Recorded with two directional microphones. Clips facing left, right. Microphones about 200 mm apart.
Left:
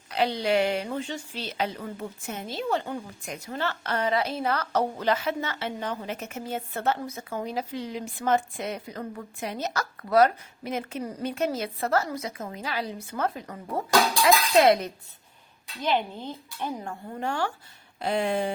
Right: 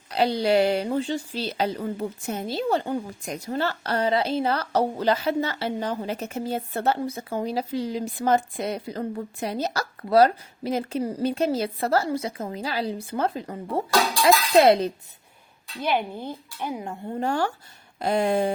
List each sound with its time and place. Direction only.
0.1 s a woman's voice: 35° right (ahead or behind)
15.8 s speech: 10° right (ahead or behind)
17.2 s a woman's voice: 35° right (ahead or behind)